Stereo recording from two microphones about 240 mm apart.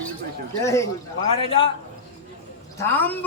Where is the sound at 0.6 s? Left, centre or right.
Centre.